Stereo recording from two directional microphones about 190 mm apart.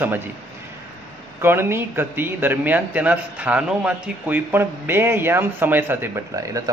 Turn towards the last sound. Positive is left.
turn(degrees=-15)  # may be behind; listen again after turning